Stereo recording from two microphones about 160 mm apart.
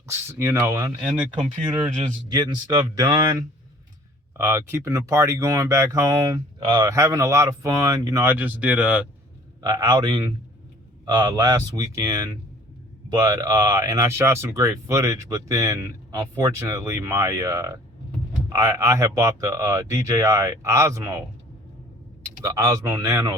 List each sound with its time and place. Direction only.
0.1 s speech: 15° right (ahead or behind)
2.3 s speech: 25° right (ahead or behind); by 9.0 s 10° right (ahead or behind)
9.6 s speech: 25° right (ahead or behind)
22.5 s speech: 20° right (ahead or behind)